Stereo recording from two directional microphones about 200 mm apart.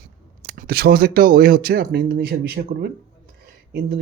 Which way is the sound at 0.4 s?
45° right (ahead or behind).